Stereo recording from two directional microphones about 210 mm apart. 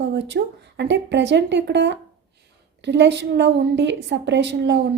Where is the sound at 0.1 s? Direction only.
55° right (ahead or behind).